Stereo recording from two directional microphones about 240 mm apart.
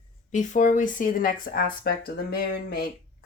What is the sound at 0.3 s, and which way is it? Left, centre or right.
Speech, left.